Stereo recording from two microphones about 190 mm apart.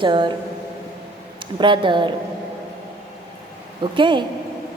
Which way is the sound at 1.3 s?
25° right (ahead or behind).